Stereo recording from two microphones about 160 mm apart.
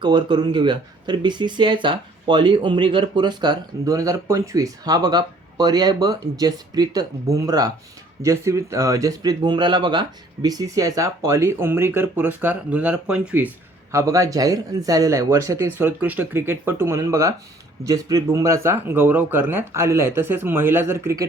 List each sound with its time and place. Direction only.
0.0 s speech: 30° right (ahead or behind); by 13.5 s 10° right (ahead or behind)
13.9 s speech: 20° right (ahead or behind)